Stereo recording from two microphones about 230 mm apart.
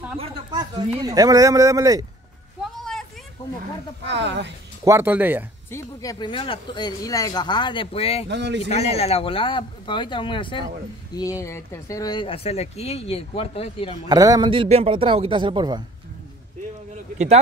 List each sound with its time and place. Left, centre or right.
0.2 s a sound: centre
0.9 s speech: centre
2.6 s a sound: centre
4.0 s speech: right
4.8 s speech: centre
5.7 s speech: centre
8.3 s speech: right
8.6 s speech: left
14.0 s a man's voice: centre
16.9 s a sound: right